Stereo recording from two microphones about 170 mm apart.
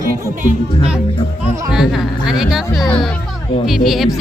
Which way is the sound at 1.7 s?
Centre (ahead or behind).